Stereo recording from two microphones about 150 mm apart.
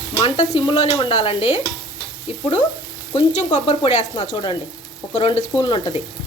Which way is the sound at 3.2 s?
50° left (ahead or behind).